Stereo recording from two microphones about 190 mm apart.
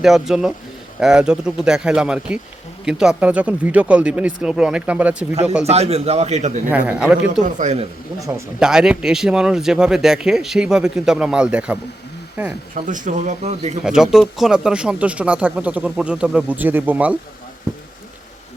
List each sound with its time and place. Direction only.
0.0 s speech: centre (ahead or behind)
5.3 s speech: 35° right (ahead or behind)
6.7 s speech: 10° right (ahead or behind)
7.4 s speech: 40° right (ahead or behind)
8.5 s speech: 5° right (ahead or behind)
12.7 s speech: 40° right (ahead or behind)
13.8 s speech: 5° right (ahead or behind)